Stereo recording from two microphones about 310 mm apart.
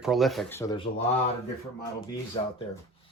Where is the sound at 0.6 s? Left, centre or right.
Centre.